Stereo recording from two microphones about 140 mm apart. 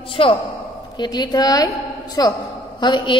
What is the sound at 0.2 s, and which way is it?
Speech, 40° left (ahead or behind).